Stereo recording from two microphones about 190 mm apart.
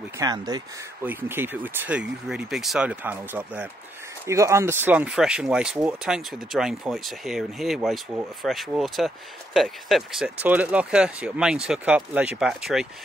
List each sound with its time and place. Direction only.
0.2 s speech: 20° right (ahead or behind); by 12.8 s centre (ahead or behind)